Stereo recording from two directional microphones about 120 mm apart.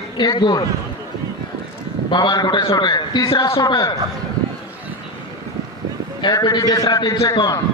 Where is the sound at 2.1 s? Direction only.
40° left (ahead or behind).